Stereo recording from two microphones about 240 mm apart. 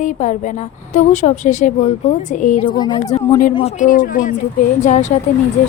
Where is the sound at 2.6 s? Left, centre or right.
Centre.